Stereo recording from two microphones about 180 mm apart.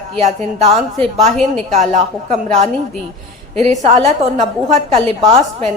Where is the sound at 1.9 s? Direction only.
40° right (ahead or behind).